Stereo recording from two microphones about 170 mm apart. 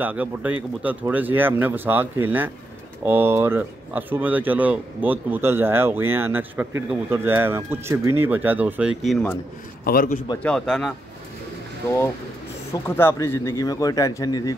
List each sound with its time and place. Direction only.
0.0 s speech: 10° right (ahead or behind)
9.8 s a man's voice: 60° left (ahead or behind)
10.4 s speech: 5° left (ahead or behind)
12.7 s speech: 15° left (ahead or behind)